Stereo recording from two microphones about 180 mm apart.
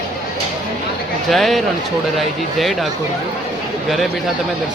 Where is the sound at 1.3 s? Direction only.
Centre (ahead or behind).